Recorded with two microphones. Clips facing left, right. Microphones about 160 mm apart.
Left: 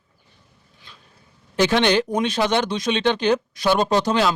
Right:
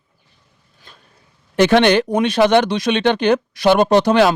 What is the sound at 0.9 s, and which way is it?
Vehicle, 45° right (ahead or behind).